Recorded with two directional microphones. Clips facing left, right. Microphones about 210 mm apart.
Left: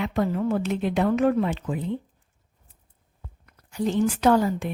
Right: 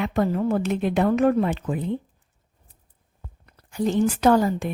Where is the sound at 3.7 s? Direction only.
45° right (ahead or behind).